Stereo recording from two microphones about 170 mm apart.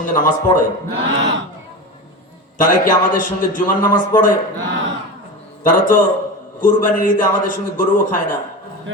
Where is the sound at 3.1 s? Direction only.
50° left (ahead or behind).